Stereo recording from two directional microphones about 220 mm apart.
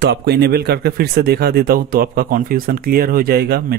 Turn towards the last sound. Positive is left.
turn(degrees=-45)  # may be behind; listen again after turning